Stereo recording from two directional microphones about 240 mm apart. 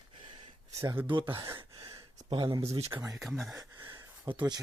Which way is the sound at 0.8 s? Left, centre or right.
Centre.